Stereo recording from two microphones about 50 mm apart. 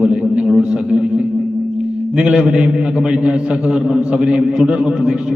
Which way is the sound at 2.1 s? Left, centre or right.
Right.